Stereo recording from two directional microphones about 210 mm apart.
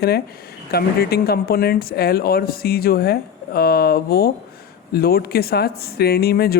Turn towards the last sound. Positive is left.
turn(degrees=50)  # may be behind; listen again after turning